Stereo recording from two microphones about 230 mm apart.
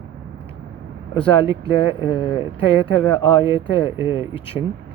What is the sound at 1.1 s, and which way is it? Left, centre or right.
Speech, left.